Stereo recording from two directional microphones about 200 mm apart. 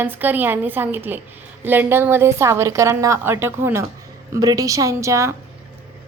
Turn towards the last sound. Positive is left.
turn(degrees=-15)  # may be behind; listen again after turning